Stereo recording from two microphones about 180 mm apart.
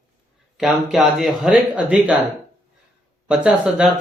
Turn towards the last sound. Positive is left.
turn(degrees=-5)  # may be behind; listen again after turning